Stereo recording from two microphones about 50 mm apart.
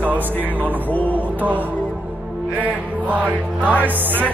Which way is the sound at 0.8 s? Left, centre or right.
Left.